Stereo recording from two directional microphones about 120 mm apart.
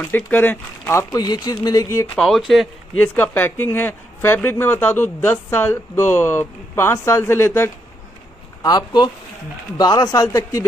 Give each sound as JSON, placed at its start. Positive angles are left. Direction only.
{"t": 0.1, "sound": "speech", "side_deg": 15}
{"t": 1.1, "sound": "speech", "side_deg": 35}
{"t": 2.1, "sound": "speech", "side_deg": 0}
{"t": 3.2, "sound": "speech", "side_deg": 15}
{"t": 8.6, "sound": "speech", "side_deg": 35}